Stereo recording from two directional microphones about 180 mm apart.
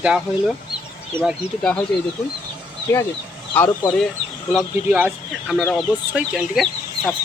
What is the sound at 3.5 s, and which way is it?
Speech, 10° left (ahead or behind).